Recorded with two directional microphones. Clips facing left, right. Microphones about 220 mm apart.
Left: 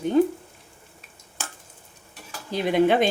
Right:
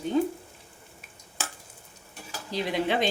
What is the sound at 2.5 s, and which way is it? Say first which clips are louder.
Speech: left 7 dB; 55° left (ahead or behind).